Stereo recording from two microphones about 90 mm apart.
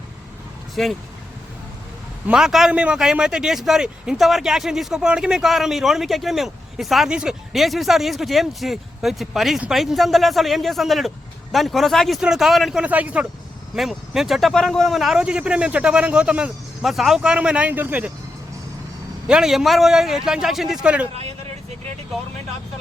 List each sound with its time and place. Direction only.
0.8 s a man's voice: centre (ahead or behind)
2.2 s a man's voice: 5° right (ahead or behind)
12.8 s speech: 15° right (ahead or behind)
13.7 s a man's voice: 5° right (ahead or behind)
19.3 s a man's voice: 5° right (ahead or behind)